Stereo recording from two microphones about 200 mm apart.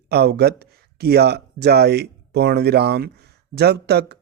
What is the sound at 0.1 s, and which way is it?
Speech, 55° right (ahead or behind).